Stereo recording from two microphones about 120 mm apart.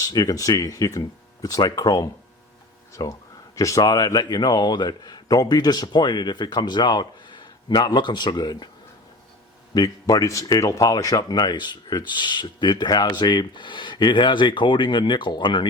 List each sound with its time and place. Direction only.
0.0 s speech: 30° left (ahead or behind)
9.7 s speech: 30° left (ahead or behind)